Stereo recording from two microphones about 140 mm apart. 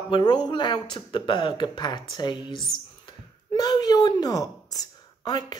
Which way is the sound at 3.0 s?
30° left (ahead or behind).